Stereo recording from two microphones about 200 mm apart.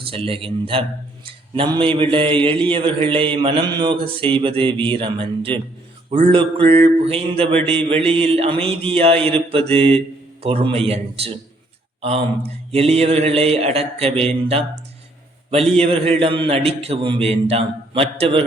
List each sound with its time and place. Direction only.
0.1 s a man's voice: 25° right (ahead or behind)
12.7 s mantra: 30° right (ahead or behind)
15.4 s a man's voice: 30° right (ahead or behind)